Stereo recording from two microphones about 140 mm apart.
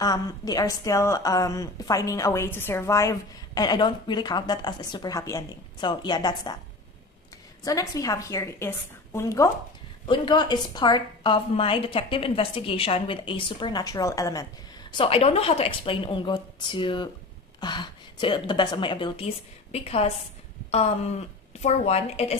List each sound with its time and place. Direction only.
0.0 s a woman's voice: 25° left (ahead or behind)
7.6 s a woman's voice: 25° left (ahead or behind)
10.0 s a woman's voice: 35° left (ahead or behind)
21.5 s a woman's voice: 50° left (ahead or behind)